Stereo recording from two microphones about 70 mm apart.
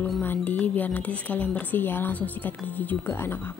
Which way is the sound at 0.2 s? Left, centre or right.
Left.